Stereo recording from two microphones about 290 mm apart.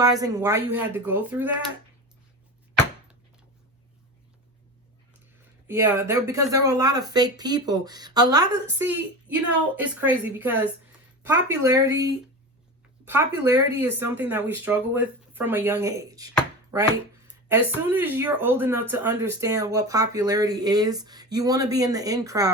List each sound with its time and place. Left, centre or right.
0.0 s speech: centre
5.6 s a woman's voice: centre
13.1 s speech: centre